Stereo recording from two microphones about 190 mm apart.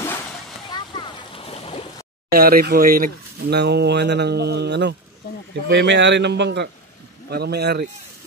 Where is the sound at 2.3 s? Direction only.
50° right (ahead or behind).